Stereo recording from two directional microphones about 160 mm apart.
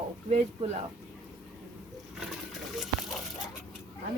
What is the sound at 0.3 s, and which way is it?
Speech, 45° right (ahead or behind).